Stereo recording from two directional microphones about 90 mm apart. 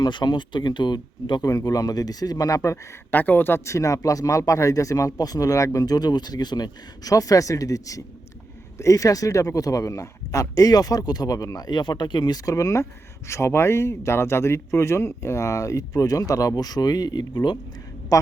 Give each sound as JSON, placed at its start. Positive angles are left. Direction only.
{"t": 0.0, "sound": "speech", "side_deg": 60}
{"t": 1.5, "sound": "speech", "side_deg": 40}
{"t": 3.1, "sound": "speech", "side_deg": 20}
{"t": 12.5, "sound": "speech", "side_deg": 35}
{"t": 18.1, "sound": "a man's voice", "side_deg": 40}